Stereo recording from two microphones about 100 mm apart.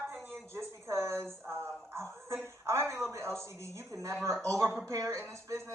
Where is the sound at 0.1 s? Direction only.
25° right (ahead or behind).